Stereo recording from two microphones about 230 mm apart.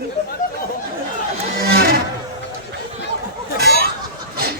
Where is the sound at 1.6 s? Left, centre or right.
Right.